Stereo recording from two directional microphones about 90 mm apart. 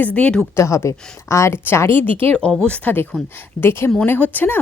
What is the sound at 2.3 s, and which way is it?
Speech, 10° left (ahead or behind).